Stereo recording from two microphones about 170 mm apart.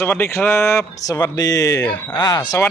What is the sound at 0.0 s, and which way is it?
Speech, 15° left (ahead or behind).